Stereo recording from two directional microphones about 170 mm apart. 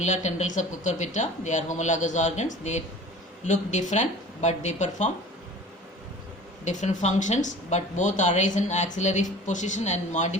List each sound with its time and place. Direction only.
0.0 s speech: 45° left (ahead or behind)
6.7 s speech: 45° left (ahead or behind)